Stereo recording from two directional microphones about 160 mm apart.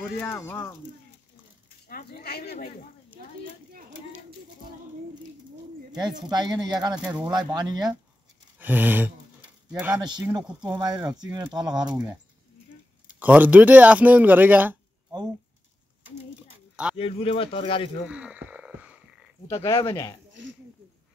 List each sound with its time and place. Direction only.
0.0 s speech: 5° left (ahead or behind)
1.9 s speech: 70° left (ahead or behind); by 2.7 s 90° left
5.9 s speech: 25° right (ahead or behind)
8.5 s a sound: 10° right (ahead or behind)
9.9 s speech: 25° right (ahead or behind)
13.1 s a man's voice: 10° right (ahead or behind)
16.9 s speech: 35° left (ahead or behind)
18.0 s a sound: 5° right (ahead or behind)
19.4 s speech: 15° left (ahead or behind)